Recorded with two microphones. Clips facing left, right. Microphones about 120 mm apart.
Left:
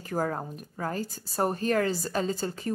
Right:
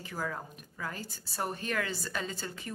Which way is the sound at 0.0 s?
45° left (ahead or behind).